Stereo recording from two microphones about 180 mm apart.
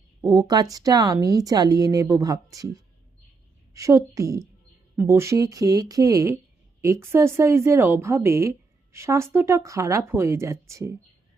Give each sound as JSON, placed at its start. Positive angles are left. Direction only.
{"t": 0.2, "sound": "a woman's voice", "side_deg": -20}
{"t": 3.8, "sound": "speech", "side_deg": -15}